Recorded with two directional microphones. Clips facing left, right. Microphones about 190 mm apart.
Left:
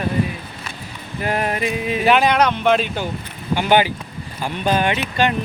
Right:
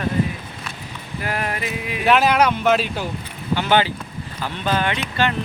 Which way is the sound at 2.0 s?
Centre (ahead or behind).